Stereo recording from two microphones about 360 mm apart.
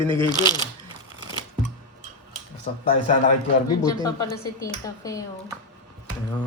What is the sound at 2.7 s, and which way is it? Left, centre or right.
Speech, centre.